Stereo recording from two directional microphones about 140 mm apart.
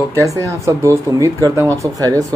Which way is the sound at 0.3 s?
20° right (ahead or behind).